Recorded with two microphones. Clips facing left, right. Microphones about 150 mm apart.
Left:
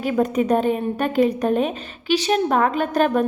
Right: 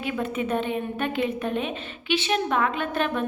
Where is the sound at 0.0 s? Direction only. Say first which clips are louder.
Left 8 dB; 40° left (ahead or behind).